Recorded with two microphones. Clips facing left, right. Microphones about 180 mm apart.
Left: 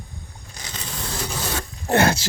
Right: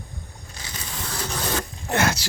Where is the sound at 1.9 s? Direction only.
30° left (ahead or behind).